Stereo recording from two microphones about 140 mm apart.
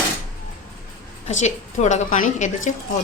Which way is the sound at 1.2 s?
55° left (ahead or behind).